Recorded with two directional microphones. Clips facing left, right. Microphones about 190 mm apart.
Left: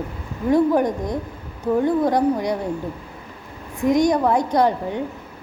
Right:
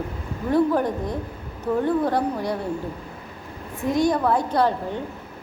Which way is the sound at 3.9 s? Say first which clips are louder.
Left 3 dB; 15° left (ahead or behind).